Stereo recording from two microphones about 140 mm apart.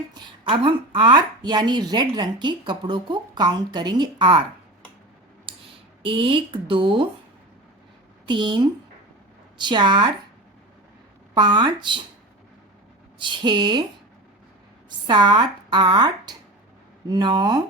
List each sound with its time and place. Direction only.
0.1 s speech: 35° right (ahead or behind)
5.5 s a sound: 35° right (ahead or behind)
6.0 s speech: 40° right (ahead or behind)
8.3 s speech: 35° right (ahead or behind)
11.3 s speech: 30° right (ahead or behind)
13.1 s speech: 35° right (ahead or behind)
14.8 s speech: 30° right (ahead or behind)